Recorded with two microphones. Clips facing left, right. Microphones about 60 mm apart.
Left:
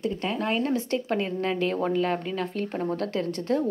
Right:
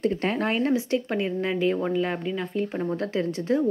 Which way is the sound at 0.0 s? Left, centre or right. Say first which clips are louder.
Right 3 dB; right.